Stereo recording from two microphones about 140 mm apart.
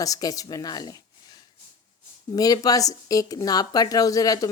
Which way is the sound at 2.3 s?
25° left (ahead or behind).